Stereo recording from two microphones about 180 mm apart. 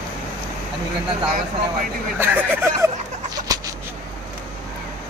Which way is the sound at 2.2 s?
10° right (ahead or behind).